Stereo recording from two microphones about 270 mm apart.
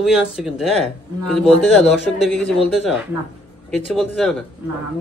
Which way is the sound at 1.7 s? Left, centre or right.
Centre.